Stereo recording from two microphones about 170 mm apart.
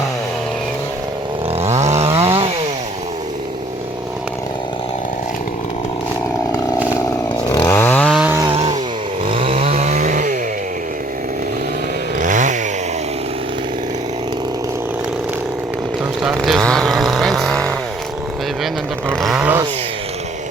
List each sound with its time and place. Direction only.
1.5 s chainsaw: 40° right (ahead or behind)
7.4 s chainsaw: 15° left (ahead or behind)
9.3 s chainsaw: 35° right (ahead or behind)
12.2 s chainsaw: 45° right (ahead or behind)
16.4 s vehicle: centre (ahead or behind)